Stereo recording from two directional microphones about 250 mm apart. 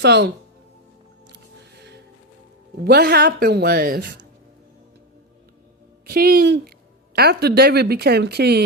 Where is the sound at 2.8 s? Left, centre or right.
Right.